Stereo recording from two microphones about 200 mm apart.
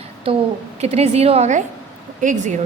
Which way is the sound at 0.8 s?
35° right (ahead or behind).